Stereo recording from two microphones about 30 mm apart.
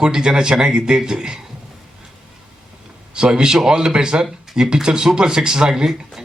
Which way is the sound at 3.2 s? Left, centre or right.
Right.